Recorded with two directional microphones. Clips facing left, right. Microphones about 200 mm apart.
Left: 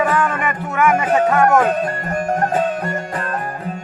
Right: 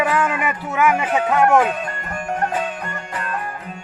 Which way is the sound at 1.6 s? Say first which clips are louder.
Left 4 dB; 40° left (ahead or behind).